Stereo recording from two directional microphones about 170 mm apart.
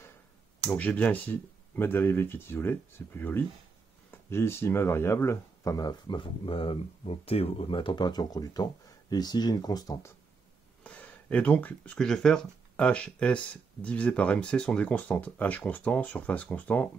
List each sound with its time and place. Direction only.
0.7 s speech: 10° left (ahead or behind)
10.8 s speech: 10° left (ahead or behind)